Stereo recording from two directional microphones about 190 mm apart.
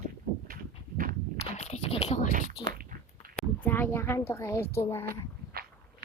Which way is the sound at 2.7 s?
45° right (ahead or behind).